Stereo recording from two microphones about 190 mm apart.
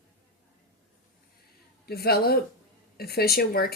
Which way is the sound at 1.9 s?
55° left (ahead or behind).